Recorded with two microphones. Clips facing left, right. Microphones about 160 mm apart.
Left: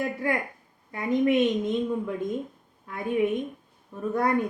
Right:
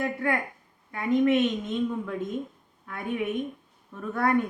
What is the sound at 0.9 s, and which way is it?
Speech, 20° left (ahead or behind).